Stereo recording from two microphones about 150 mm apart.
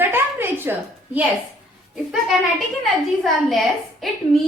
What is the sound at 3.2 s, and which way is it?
A woman's voice, centre (ahead or behind).